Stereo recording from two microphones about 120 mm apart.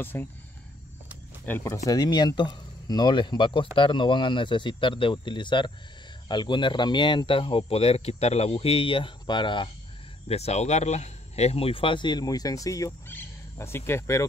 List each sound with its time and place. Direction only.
0.0 s speech: 15° left (ahead or behind)
1.4 s speech: 20° left (ahead or behind)
1.9 s speech: 35° left (ahead or behind)
10.2 s speech: 60° left (ahead or behind); by 14.2 s 25° left (ahead or behind)